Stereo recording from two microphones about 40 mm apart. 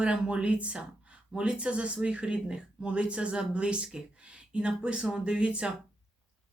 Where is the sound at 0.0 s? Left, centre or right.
Right.